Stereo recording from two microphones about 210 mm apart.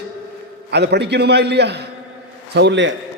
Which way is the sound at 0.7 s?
55° right (ahead or behind).